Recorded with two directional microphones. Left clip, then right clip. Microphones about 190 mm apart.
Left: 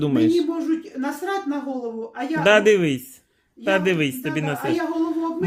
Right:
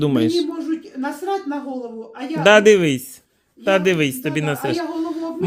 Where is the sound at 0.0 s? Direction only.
25° right (ahead or behind).